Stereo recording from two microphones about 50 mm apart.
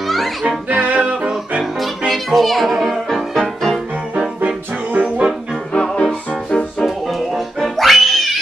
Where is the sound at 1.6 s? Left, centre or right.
Centre.